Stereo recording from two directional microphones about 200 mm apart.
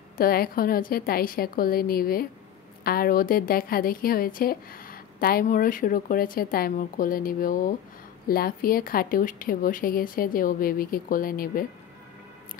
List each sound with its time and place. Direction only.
0.2 s a woman's voice: 45° left (ahead or behind)